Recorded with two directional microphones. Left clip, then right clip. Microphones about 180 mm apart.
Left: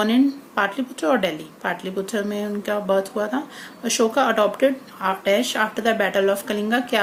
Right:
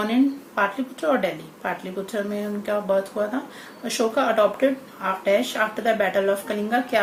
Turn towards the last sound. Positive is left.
turn(degrees=50)  # may be behind; listen again after turning